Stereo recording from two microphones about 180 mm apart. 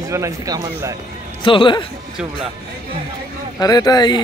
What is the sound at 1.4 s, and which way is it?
Speech, 30° left (ahead or behind).